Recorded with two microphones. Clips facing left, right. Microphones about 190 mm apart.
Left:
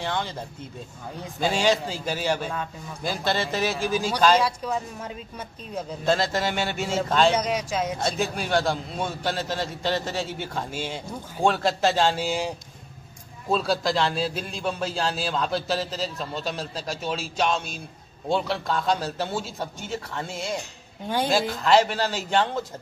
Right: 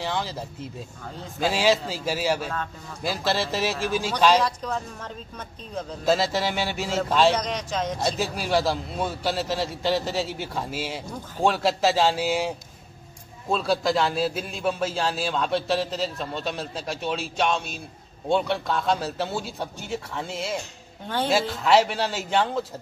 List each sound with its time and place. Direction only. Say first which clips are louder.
0.0 s a man's voice: even; 5° right (ahead or behind)
6.0 s a man's voice: right 1 dB; 5° right (ahead or behind)
7.3 s speech: left 2 dB; 10° left (ahead or behind)
8.2 s a man's voice: left 1 dB; centre (ahead or behind)
21.6 s a man's voice: even; centre (ahead or behind)